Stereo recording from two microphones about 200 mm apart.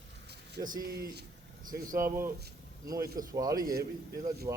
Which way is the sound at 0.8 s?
50° right (ahead or behind).